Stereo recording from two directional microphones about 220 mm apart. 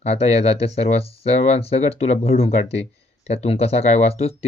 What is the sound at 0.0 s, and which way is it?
Speech, 30° left (ahead or behind).